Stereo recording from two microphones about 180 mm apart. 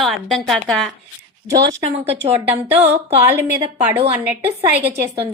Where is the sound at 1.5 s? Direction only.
20° right (ahead or behind).